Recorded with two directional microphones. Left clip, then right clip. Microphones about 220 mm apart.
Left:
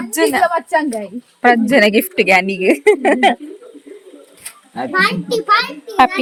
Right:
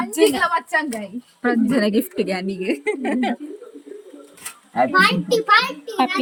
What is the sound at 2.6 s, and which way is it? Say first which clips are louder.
Speech: left 11 dB; 15° left (ahead or behind).